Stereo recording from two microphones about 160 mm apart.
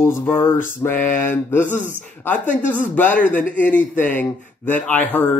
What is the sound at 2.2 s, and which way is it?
Speech, 10° left (ahead or behind).